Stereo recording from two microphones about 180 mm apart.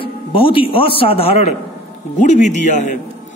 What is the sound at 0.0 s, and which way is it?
A man's voice, 30° left (ahead or behind).